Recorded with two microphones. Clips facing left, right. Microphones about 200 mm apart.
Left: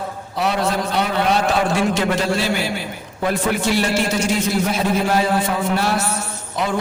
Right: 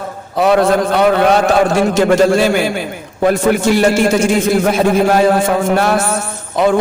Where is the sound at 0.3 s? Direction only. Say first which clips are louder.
Right 9 dB; 50° right (ahead or behind).